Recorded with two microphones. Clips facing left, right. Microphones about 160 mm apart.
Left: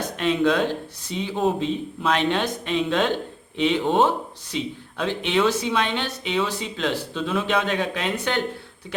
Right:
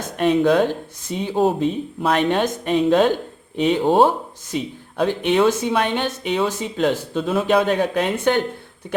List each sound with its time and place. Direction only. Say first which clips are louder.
0.2 s speech: right 5 dB; 45° right (ahead or behind)